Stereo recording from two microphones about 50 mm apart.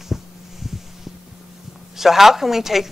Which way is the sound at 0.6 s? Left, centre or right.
Centre.